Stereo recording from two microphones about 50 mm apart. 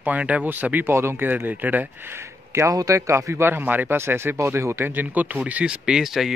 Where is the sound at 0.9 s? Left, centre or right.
Right.